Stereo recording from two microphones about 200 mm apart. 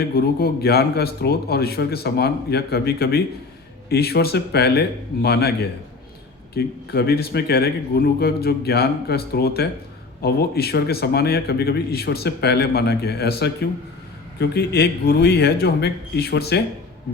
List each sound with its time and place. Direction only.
0.0 s a man's voice: 50° left (ahead or behind)